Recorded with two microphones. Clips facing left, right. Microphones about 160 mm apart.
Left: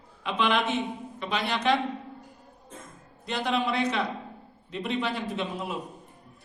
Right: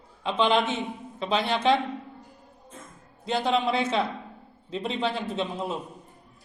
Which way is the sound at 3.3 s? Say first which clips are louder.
Right 3 dB; 25° right (ahead or behind).